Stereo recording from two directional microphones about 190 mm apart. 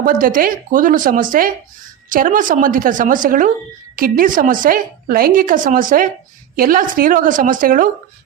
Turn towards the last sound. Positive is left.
turn(degrees=-45)  # may be behind; listen again after turning